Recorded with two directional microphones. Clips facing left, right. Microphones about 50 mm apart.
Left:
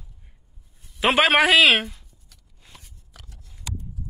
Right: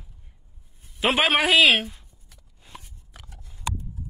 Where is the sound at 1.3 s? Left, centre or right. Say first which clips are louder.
Left 4 dB; left.